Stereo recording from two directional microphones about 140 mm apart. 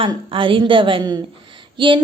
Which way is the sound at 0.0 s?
40° right (ahead or behind).